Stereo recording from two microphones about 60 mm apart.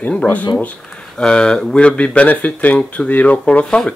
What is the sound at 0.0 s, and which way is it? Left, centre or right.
Speech, left.